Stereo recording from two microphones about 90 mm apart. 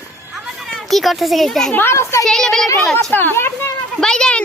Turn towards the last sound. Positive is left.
turn(degrees=10)  # may be behind; listen again after turning